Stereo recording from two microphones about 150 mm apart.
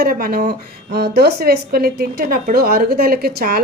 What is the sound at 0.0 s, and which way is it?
A woman's voice, 75° right (ahead or behind).